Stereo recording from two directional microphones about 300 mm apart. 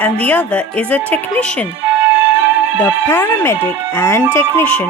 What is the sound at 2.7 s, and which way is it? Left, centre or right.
Speech, centre.